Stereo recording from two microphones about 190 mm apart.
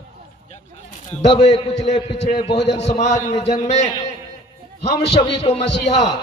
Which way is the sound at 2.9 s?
40° left (ahead or behind).